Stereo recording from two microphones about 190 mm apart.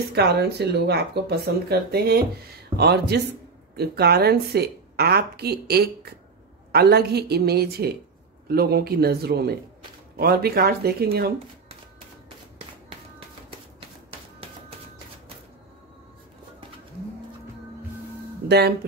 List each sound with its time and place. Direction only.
0.1 s a woman's voice: 60° right (ahead or behind)
18.5 s a woman's voice: 60° right (ahead or behind)